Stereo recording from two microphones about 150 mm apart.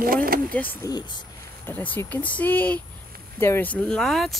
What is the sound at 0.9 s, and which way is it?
Speech, 30° left (ahead or behind).